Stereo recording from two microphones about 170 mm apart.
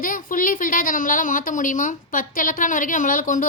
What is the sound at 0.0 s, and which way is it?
A woman's voice, 55° left (ahead or behind).